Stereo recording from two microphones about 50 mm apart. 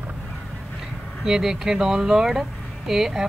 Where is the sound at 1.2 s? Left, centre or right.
Centre.